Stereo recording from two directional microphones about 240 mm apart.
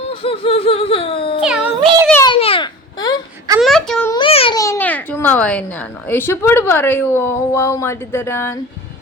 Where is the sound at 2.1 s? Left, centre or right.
Centre.